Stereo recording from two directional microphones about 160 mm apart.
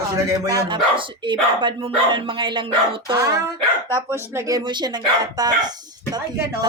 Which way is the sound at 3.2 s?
20° right (ahead or behind).